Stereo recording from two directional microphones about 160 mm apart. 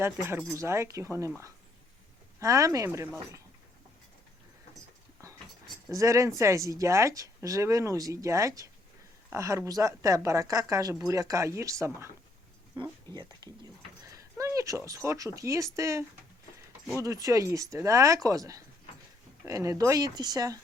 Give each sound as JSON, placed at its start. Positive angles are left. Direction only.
{"t": 0.0, "sound": "speech", "side_deg": -15}
{"t": 2.4, "sound": "speech", "side_deg": -20}
{"t": 5.9, "sound": "speech", "side_deg": -20}